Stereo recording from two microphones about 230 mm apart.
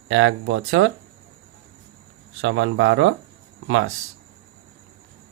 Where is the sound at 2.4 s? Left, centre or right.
Right.